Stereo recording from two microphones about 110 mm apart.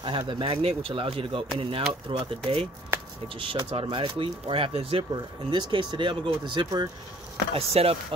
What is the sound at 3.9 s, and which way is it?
Speech, 50° right (ahead or behind).